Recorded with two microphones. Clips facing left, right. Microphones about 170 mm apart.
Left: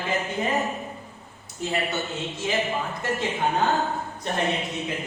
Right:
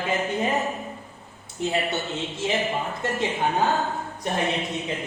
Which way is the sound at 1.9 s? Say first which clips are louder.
Right 1 dB; 20° right (ahead or behind).